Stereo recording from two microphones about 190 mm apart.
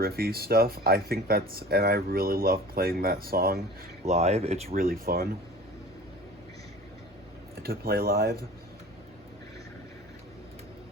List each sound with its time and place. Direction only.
0.0 s speech: 50° right (ahead or behind)
4.0 s speech: 35° right (ahead or behind); by 5.3 s 55° right (ahead or behind)
7.6 s speech: 55° right (ahead or behind)